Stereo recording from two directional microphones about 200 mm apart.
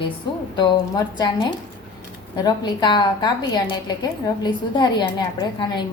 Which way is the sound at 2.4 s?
20° left (ahead or behind).